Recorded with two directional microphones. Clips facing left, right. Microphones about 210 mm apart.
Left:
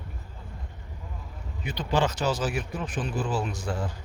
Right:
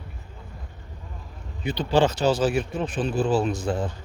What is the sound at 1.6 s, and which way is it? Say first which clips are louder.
Speech: right 5 dB; 30° right (ahead or behind).